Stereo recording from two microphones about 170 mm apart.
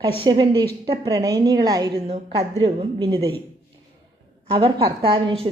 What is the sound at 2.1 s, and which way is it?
A woman's voice, 35° right (ahead or behind).